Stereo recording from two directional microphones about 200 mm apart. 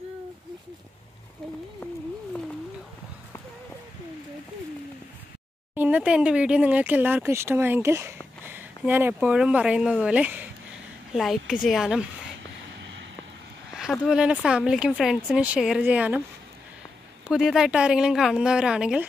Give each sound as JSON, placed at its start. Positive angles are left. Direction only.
{"t": 1.8, "sound": "a sound", "side_deg": 5}
{"t": 5.8, "sound": "speech", "side_deg": -5}
{"t": 12.8, "sound": "vehicle", "side_deg": -65}
{"t": 14.0, "sound": "speech", "side_deg": -5}
{"t": 17.3, "sound": "speech", "side_deg": -5}